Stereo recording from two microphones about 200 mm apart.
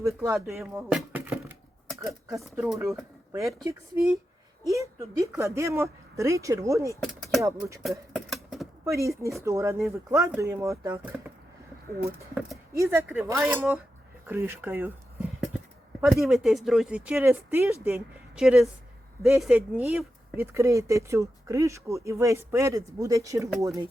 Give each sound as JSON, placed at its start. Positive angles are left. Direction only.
{"t": 0.0, "sound": "speech", "side_deg": -15}
{"t": 0.9, "sound": "a sound", "side_deg": -10}
{"t": 3.3, "sound": "speech", "side_deg": -15}
{"t": 7.0, "sound": "speech", "side_deg": 0}
{"t": 7.8, "sound": "a sound", "side_deg": 0}
{"t": 8.8, "sound": "speech", "side_deg": -15}
{"t": 12.3, "sound": "speech", "side_deg": -5}
{"t": 16.0, "sound": "speech", "side_deg": -5}